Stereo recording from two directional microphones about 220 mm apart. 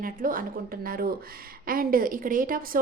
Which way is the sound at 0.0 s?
40° right (ahead or behind).